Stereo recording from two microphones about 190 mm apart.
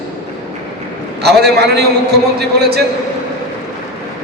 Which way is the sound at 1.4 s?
60° right (ahead or behind).